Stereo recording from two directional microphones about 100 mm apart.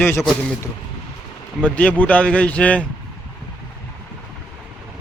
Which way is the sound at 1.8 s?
15° left (ahead or behind).